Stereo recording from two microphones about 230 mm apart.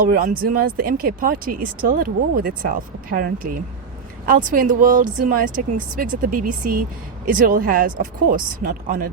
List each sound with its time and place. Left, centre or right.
0.0 s speech: right